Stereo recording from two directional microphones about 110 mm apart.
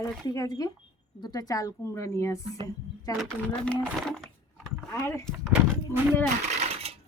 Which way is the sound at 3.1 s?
Centre (ahead or behind).